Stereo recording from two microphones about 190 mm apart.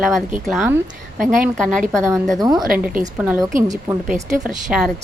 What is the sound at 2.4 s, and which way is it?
Speech, 20° right (ahead or behind).